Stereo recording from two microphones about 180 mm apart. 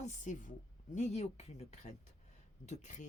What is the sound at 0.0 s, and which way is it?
Speech, 45° left (ahead or behind).